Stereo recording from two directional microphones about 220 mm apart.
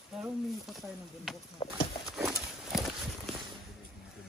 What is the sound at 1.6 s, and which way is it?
Speech, 20° left (ahead or behind).